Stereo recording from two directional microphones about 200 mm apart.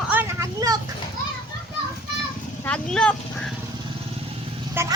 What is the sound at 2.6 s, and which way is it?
Speech, 5° left (ahead or behind).